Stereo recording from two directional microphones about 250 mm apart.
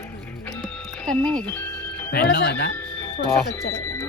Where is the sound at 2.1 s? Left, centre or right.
Left.